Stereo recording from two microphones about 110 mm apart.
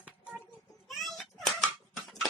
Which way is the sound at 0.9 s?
Centre (ahead or behind).